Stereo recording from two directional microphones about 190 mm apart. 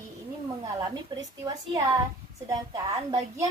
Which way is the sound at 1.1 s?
25° right (ahead or behind).